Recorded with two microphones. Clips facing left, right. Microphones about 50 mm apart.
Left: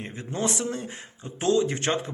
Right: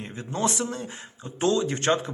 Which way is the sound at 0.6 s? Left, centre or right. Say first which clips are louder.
Even; centre.